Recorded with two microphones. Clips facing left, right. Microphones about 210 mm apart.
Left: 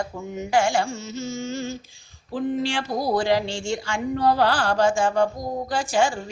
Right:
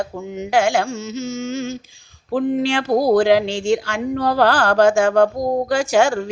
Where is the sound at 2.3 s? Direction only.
55° right (ahead or behind).